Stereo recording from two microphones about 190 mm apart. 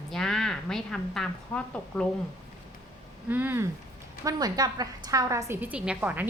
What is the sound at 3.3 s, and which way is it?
A woman's voice, 10° right (ahead or behind).